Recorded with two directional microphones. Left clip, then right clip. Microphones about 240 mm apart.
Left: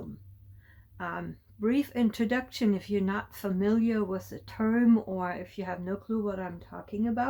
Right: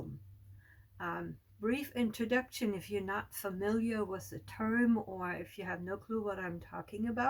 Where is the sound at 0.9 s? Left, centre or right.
Left.